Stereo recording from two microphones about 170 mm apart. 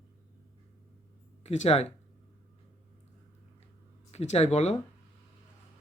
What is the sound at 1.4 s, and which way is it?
Speech, 40° left (ahead or behind).